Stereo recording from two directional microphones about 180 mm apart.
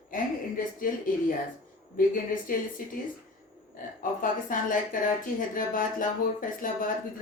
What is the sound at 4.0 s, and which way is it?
Speech, 50° left (ahead or behind).